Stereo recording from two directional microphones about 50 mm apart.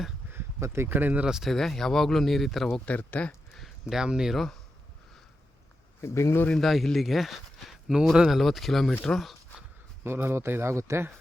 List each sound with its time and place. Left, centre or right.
0.6 s speech: right
0.9 s speech: right
1.5 s speech: centre
2.8 s speech: left
3.5 s a sound: centre
3.9 s speech: centre
6.0 s speech: left
6.6 s speech: centre
10.0 s speech: right